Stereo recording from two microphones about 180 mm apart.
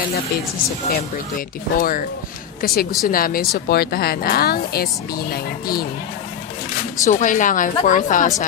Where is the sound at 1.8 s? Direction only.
50° left (ahead or behind).